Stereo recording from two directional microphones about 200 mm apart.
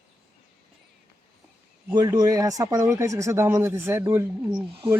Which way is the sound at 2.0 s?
20° right (ahead or behind).